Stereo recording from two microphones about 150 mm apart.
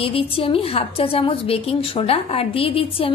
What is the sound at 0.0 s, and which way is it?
A woman's voice, 40° left (ahead or behind).